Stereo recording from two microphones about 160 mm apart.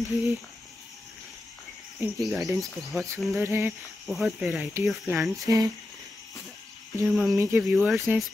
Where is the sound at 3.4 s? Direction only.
15° right (ahead or behind).